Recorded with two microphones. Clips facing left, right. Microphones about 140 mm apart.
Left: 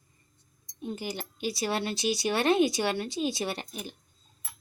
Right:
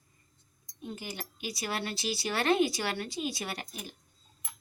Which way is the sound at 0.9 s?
30° left (ahead or behind).